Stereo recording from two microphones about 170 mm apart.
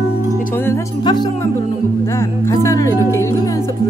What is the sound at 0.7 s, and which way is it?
Music, 25° left (ahead or behind).